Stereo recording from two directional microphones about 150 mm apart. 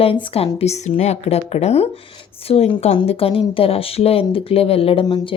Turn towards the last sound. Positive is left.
turn(degrees=30)  # may be behind; listen again after turning